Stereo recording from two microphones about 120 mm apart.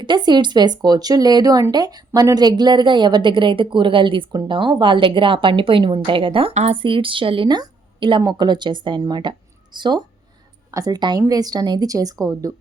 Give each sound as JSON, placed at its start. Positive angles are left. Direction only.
{"t": 0.0, "sound": "a woman's voice", "side_deg": -40}
{"t": 6.5, "sound": "speech", "side_deg": -70}
{"t": 6.7, "sound": "a woman's voice", "side_deg": -45}